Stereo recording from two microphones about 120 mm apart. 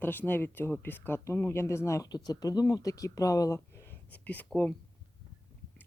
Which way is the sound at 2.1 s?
35° left (ahead or behind).